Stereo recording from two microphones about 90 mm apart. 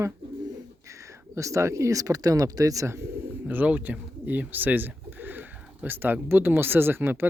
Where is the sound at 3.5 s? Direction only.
20° right (ahead or behind).